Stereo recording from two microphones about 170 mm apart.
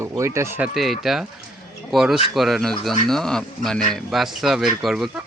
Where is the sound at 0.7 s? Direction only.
Centre (ahead or behind).